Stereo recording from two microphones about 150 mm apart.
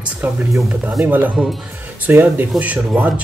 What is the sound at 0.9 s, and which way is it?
Speech, 10° right (ahead or behind).